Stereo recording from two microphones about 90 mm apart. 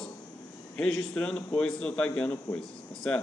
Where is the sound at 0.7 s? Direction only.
10° left (ahead or behind).